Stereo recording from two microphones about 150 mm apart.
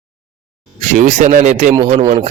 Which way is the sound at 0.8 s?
60° right (ahead or behind).